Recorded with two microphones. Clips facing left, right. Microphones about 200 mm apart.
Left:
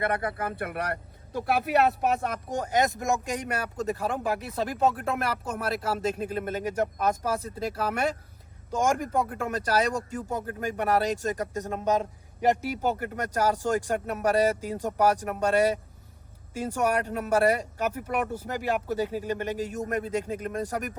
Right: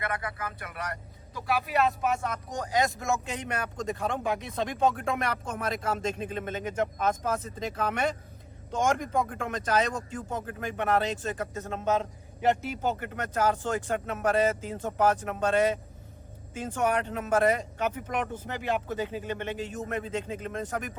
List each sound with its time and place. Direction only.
0.2 s speech: 45° left (ahead or behind); by 2.3 s 60° left (ahead or behind)
2.5 s speech: 25° left (ahead or behind)